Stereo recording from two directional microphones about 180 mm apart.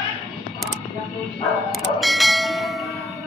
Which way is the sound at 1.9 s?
Centre (ahead or behind).